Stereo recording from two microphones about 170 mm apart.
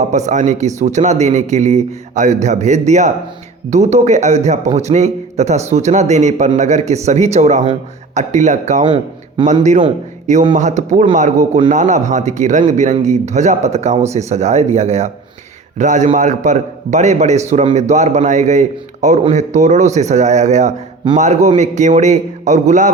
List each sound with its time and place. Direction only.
0.1 s speech: 45° right (ahead or behind)
10.5 s speech: 45° right (ahead or behind)